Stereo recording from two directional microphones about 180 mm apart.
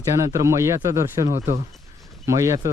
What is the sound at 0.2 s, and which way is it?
Speech, 15° right (ahead or behind).